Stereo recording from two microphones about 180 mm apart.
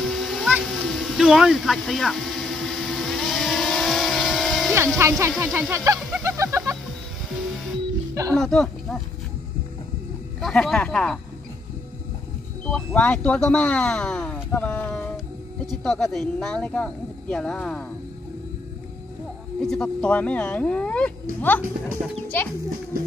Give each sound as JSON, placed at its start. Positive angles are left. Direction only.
{"t": 0.0, "sound": "a sound", "side_deg": 0}
{"t": 5.0, "sound": "speech", "side_deg": -15}
{"t": 5.9, "sound": "a sound", "side_deg": 0}
{"t": 6.2, "sound": "music", "side_deg": -15}
{"t": 8.1, "sound": "music", "side_deg": -20}
{"t": 8.4, "sound": "speech", "side_deg": 5}
{"t": 10.4, "sound": "speech", "side_deg": 0}
{"t": 12.6, "sound": "speech", "side_deg": 5}
{"t": 19.6, "sound": "speech", "side_deg": 5}